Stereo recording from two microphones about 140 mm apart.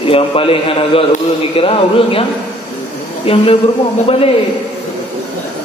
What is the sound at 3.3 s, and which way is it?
Speech, 40° left (ahead or behind).